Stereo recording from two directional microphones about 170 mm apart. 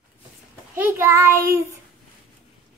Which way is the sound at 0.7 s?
15° right (ahead or behind).